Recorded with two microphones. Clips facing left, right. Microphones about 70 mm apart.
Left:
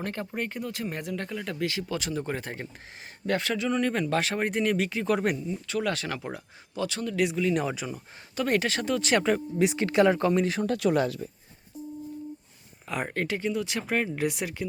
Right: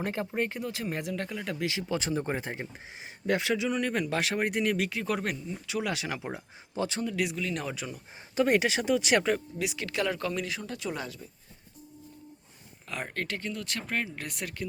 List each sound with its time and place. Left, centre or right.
0.0 s speech: centre
2.0 s speech: right; by 5.5 s centre
5.6 s speech: centre
6.7 s speech: right
7.2 s speech: centre
8.4 s speech: centre
9.6 s speech: left
10.5 s speech: left
13.1 s speech: centre